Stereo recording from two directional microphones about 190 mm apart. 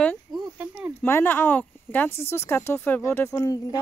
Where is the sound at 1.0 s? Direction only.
10° left (ahead or behind).